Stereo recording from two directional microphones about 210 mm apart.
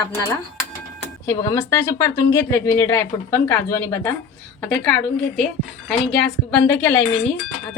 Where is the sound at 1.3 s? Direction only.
15° left (ahead or behind).